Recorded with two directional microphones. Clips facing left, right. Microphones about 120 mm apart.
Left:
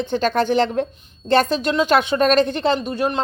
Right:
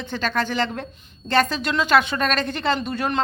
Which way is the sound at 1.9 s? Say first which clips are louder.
Left 4 dB; 20° left (ahead or behind).